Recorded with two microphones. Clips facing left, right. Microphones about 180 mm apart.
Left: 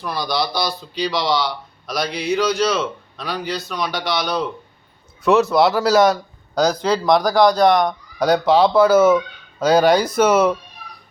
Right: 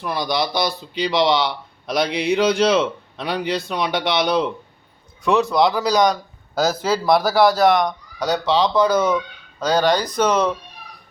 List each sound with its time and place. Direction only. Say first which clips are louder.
0.1 s a man's voice: even; 20° right (ahead or behind)
5.2 s a man's voice: left 2 dB; 5° left (ahead or behind)
8.2 s speech: left 4 dB; 10° left (ahead or behind)